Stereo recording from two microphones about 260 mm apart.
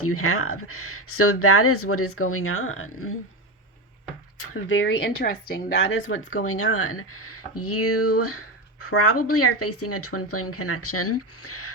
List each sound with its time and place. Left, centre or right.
0.0 s speech: left
4.4 s speech: left
6.1 s speech: left